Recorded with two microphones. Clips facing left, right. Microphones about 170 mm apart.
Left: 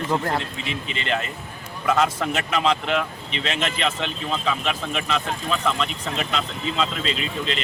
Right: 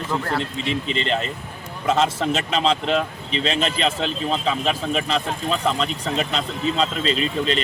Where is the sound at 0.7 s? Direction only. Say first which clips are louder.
Right 3 dB; 35° right (ahead or behind).